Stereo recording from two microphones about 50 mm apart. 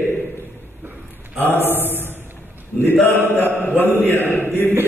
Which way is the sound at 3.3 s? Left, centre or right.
Left.